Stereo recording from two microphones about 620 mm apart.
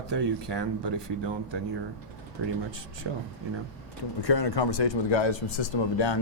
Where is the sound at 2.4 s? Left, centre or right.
Right.